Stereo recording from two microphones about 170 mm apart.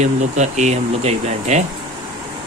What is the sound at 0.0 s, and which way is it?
Speech, 45° right (ahead or behind).